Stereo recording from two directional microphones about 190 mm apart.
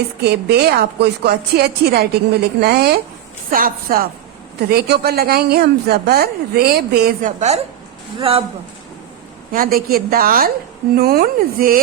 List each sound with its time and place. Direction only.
0.2 s a woman's voice: 60° right (ahead or behind); by 8.4 s 30° right (ahead or behind)
9.5 s a woman's voice: 50° right (ahead or behind)